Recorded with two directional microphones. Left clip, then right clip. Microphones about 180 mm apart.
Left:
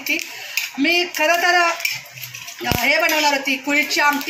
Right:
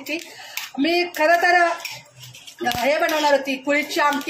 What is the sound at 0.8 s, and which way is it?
Speech, 55° right (ahead or behind).